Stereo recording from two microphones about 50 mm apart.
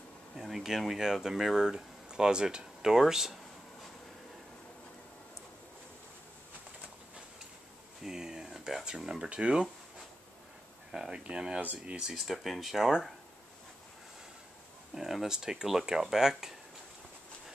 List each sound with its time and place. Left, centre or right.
0.4 s speech: centre
8.0 s a sound: centre
8.8 s speech: centre
10.9 s speech: centre
12.1 s speech: centre
15.0 s speech: centre